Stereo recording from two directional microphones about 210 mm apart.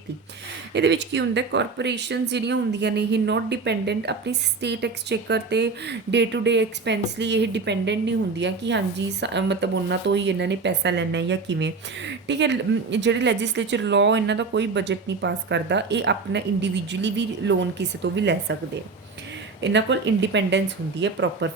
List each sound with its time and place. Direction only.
0.7 s speech: 55° right (ahead or behind)
19.6 s speech: 55° right (ahead or behind)